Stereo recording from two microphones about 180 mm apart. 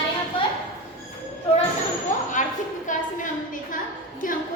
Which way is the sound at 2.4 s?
45° left (ahead or behind).